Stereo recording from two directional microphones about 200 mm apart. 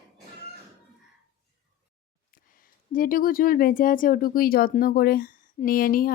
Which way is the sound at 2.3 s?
45° left (ahead or behind).